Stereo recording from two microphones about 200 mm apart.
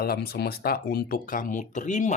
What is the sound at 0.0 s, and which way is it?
Speech, 50° left (ahead or behind).